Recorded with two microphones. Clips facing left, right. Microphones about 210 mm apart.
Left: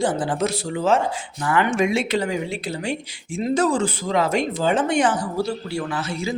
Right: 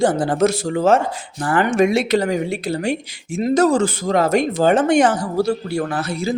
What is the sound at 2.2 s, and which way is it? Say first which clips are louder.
A man's voice: right 5 dB; 55° right (ahead or behind).